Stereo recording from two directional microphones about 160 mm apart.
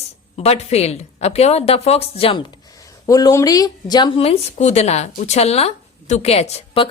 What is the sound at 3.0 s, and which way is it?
Speech, 20° left (ahead or behind).